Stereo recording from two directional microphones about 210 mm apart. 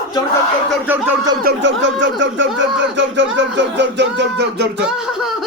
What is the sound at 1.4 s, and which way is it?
Speech, 55° right (ahead or behind).